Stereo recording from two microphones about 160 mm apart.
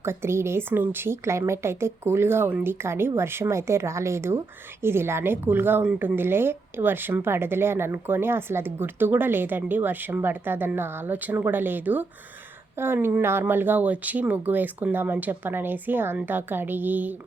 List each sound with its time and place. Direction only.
0.0 s speech: 15° right (ahead or behind)